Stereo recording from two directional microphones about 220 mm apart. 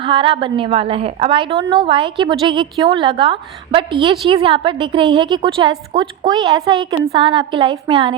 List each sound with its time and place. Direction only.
0.0 s a woman's voice: 25° right (ahead or behind)